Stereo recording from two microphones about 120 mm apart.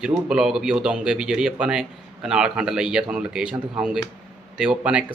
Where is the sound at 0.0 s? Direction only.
5° right (ahead or behind).